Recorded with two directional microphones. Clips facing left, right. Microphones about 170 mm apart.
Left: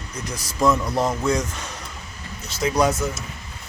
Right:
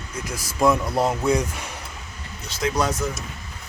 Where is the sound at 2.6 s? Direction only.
10° left (ahead or behind).